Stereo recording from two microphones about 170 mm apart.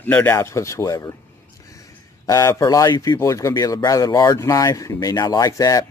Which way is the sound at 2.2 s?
15° left (ahead or behind).